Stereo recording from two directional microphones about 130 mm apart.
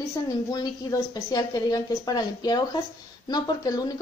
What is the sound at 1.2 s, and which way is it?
Speech, 30° left (ahead or behind).